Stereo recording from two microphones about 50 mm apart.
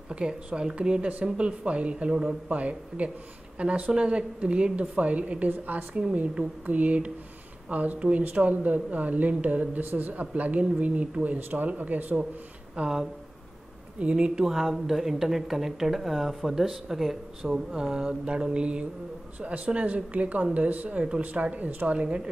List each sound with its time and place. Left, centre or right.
0.1 s a woman's voice: centre
5.5 s a woman's voice: right
12.7 s speech: centre
13.9 s a woman's voice: right
14.4 s a woman's voice: centre; by 21.9 s right
21.9 s a woman's voice: right